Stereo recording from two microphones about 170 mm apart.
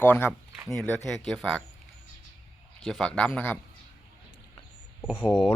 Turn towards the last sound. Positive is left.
turn(degrees=0)  # may be behind; listen again after turning